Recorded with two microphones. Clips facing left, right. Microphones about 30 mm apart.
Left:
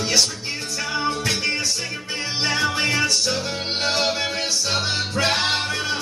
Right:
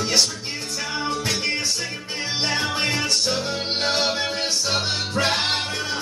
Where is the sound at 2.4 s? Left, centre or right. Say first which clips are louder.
Left 2 dB; left.